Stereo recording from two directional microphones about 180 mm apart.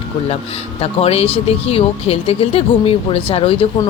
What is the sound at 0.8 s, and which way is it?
Speech, 35° left (ahead or behind).